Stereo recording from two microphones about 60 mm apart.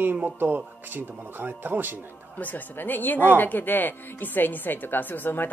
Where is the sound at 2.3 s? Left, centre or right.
Left.